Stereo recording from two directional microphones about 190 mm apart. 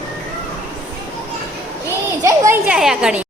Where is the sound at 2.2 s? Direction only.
15° right (ahead or behind).